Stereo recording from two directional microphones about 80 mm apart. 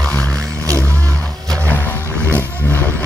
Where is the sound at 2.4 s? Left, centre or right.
Left.